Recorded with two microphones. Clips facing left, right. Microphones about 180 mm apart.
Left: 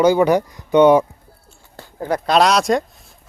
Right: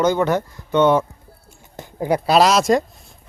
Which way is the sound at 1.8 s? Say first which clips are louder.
Right 2 dB; 15° right (ahead or behind).